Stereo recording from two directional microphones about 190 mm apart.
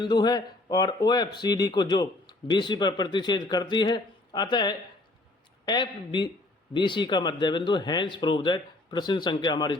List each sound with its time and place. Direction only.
0.0 s speech: 20° left (ahead or behind)